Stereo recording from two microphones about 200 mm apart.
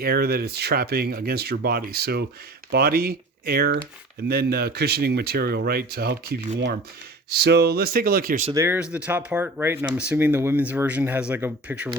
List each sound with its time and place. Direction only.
0.0 s speech: 50° right (ahead or behind)
8.5 s speech: 10° right (ahead or behind)